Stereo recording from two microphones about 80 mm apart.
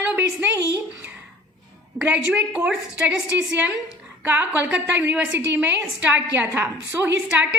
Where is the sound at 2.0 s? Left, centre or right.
Centre.